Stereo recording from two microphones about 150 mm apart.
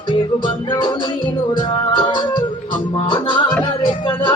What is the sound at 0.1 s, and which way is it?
Music, 30° left (ahead or behind).